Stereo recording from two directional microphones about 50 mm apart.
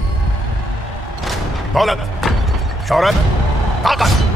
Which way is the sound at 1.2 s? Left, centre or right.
Centre.